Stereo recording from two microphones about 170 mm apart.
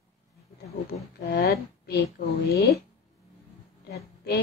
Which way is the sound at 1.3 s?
65° left (ahead or behind).